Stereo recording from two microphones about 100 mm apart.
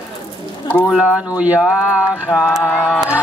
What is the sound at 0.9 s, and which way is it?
Speech, 10° right (ahead or behind).